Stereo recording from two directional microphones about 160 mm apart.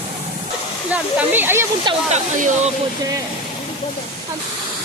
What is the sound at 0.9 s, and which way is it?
Speech, 10° right (ahead or behind).